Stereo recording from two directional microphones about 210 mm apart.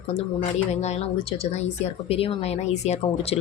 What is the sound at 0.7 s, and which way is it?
Speech, 30° left (ahead or behind).